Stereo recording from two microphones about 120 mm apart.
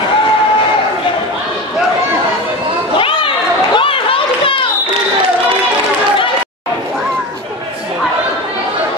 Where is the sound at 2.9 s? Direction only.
45° left (ahead or behind).